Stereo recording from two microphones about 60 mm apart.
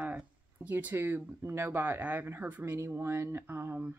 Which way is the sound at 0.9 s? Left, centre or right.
Right.